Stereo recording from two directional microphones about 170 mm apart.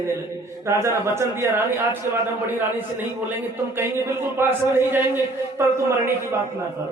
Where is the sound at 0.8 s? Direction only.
15° right (ahead or behind).